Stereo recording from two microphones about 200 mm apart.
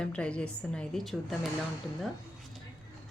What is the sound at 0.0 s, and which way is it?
A woman's voice, 5° left (ahead or behind).